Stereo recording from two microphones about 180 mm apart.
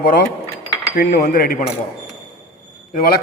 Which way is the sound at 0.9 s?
50° left (ahead or behind).